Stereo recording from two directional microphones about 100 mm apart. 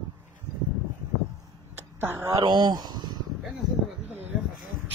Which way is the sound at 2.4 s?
45° right (ahead or behind).